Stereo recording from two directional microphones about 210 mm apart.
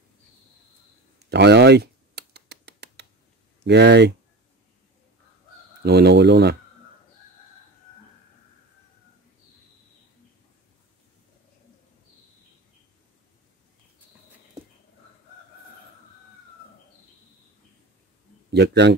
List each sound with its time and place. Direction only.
1.2 s a sound: 55° right (ahead or behind)
3.6 s speech: 55° right (ahead or behind)
5.8 s speech: 50° right (ahead or behind)
18.5 s speech: 55° right (ahead or behind)